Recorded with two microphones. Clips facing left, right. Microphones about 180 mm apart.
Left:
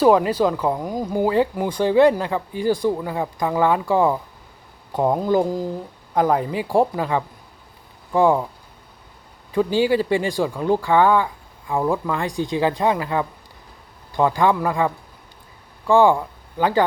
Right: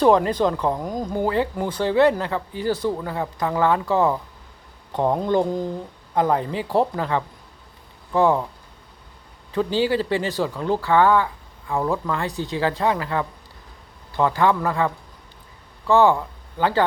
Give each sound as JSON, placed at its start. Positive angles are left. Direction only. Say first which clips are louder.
{"t": 0.0, "sound": "speech", "louder": "left 1 dB", "side_deg": 10}
{"t": 9.5, "sound": "speech", "louder": "left 3 dB", "side_deg": 10}